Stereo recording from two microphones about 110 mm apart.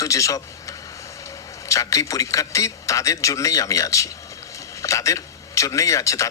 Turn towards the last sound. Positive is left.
turn(degrees=30)  # may be behind; listen again after turning